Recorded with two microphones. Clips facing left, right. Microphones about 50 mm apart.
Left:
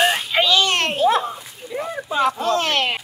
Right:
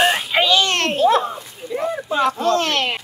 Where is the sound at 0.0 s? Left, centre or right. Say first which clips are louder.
Right 1 dB; centre.